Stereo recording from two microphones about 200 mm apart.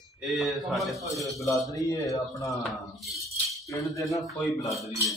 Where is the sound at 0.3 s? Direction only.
Centre (ahead or behind).